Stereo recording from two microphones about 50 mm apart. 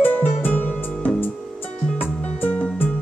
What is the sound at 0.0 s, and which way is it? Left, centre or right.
Music, left.